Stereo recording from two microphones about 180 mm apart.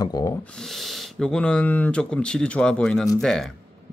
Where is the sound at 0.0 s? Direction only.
20° left (ahead or behind).